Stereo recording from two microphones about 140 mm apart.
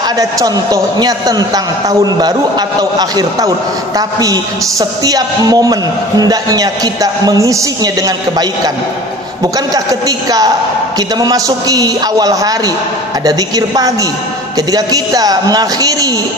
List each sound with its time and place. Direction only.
0.2 s a man's voice: 25° right (ahead or behind)
10.0 s a man's voice: 25° right (ahead or behind)